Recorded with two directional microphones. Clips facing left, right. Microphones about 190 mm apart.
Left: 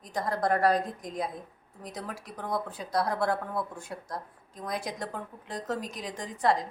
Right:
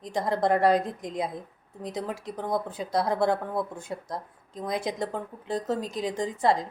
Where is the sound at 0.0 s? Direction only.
25° right (ahead or behind).